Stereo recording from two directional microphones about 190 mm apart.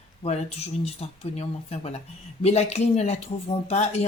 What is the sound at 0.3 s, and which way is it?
Speech, 35° left (ahead or behind).